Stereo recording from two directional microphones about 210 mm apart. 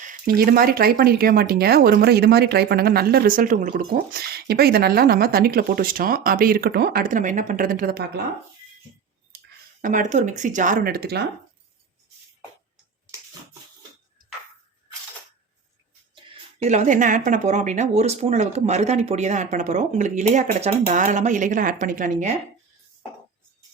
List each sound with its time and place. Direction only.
0.0 s speech: 40° right (ahead or behind)
9.8 s speech: 40° right (ahead or behind)
16.6 s speech: 35° right (ahead or behind)